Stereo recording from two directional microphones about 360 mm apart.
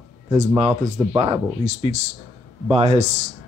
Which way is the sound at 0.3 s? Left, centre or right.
Centre.